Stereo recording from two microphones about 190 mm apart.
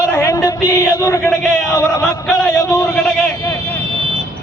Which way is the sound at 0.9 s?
15° left (ahead or behind).